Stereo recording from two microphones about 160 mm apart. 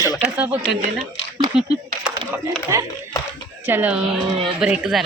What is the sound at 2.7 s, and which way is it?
A woman's voice, 20° right (ahead or behind).